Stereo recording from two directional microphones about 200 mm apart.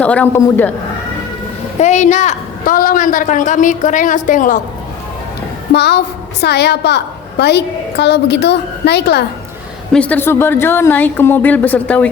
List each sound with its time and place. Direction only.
0.0 s a woman's voice: 5° left (ahead or behind)
1.8 s a woman's voice: 35° left (ahead or behind)
5.7 s a woman's voice: 55° left (ahead or behind)
9.9 s a woman's voice: 5° left (ahead or behind)